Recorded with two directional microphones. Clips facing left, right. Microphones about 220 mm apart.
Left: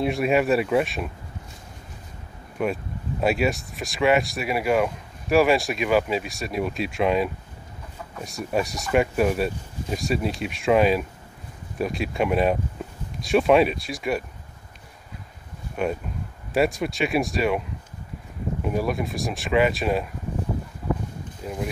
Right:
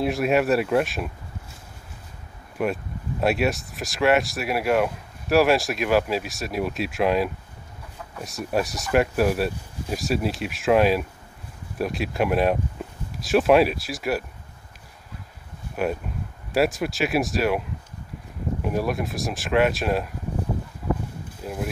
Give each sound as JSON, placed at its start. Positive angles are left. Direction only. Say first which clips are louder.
{"t": 0.0, "sound": "speech", "louder": "even", "side_deg": 0}
{"t": 2.6, "sound": "speech", "louder": "even", "side_deg": 0}
{"t": 15.7, "sound": "speech", "louder": "even", "side_deg": 0}
{"t": 21.4, "sound": "speech", "louder": "even", "side_deg": -5}